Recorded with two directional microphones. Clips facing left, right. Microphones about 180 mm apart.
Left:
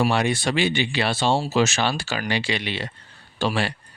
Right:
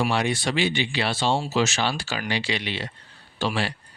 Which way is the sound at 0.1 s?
50° left (ahead or behind).